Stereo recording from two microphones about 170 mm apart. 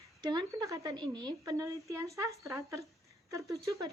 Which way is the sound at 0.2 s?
25° right (ahead or behind).